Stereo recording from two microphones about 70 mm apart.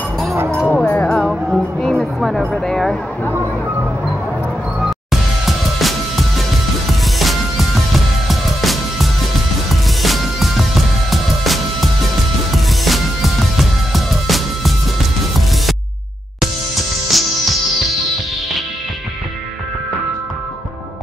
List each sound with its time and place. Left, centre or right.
0.7 s music: left
1.0 s music: centre
2.1 s a sound: centre
4.7 s music: centre
17.1 s music: centre